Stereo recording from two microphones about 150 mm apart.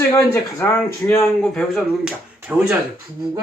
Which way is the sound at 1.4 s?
5° left (ahead or behind).